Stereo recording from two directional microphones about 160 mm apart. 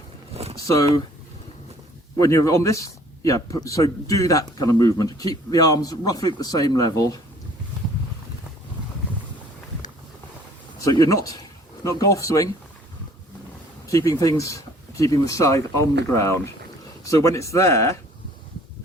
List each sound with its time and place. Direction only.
2.1 s speech: 20° left (ahead or behind)
10.8 s speech: 20° left (ahead or behind)
13.8 s speech: 20° left (ahead or behind)